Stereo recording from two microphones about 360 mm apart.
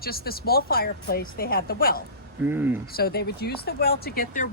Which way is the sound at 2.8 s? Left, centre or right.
Left.